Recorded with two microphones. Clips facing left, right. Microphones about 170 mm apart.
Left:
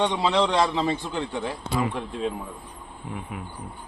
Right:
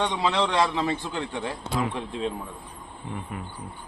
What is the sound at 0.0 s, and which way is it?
Speech, 20° left (ahead or behind).